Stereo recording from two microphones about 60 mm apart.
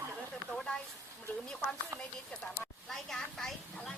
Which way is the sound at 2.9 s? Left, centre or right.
Centre.